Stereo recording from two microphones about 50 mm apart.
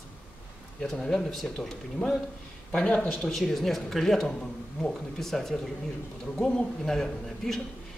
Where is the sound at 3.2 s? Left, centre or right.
Centre.